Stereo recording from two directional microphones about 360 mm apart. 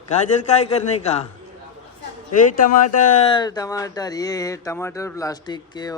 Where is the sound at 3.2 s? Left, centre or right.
Centre.